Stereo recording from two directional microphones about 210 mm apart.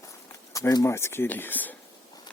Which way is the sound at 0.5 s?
15° left (ahead or behind).